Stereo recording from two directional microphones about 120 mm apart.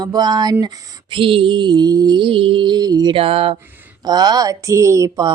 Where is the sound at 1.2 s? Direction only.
45° right (ahead or behind).